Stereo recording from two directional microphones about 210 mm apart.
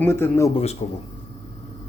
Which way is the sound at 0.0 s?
10° left (ahead or behind).